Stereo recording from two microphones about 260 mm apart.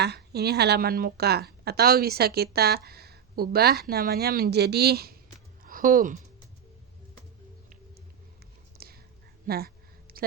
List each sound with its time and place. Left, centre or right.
0.0 s speech: right
8.8 s whispering: right
9.5 s a sound: right